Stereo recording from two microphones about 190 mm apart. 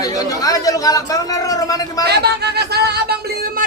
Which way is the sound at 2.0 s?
60° right (ahead or behind).